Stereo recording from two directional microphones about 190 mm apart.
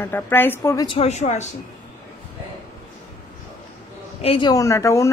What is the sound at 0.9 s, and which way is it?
Speech, 35° left (ahead or behind).